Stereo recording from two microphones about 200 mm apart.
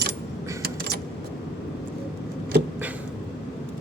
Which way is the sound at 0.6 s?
55° right (ahead or behind).